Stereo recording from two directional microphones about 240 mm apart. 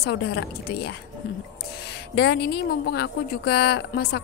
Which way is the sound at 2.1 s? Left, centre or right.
Left.